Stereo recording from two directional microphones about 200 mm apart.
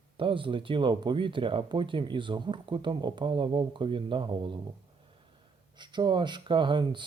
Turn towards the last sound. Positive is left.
turn(degrees=-25)  # may be behind; listen again after turning